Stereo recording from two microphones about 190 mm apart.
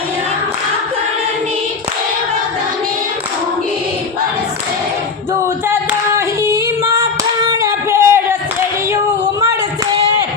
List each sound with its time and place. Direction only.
6.1 s singing: 15° right (ahead or behind)